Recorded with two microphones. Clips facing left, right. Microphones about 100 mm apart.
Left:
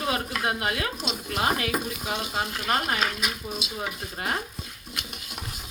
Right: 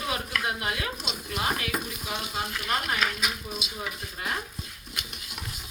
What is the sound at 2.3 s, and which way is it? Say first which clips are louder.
Stir: left 3 dB; 40° left (ahead or behind).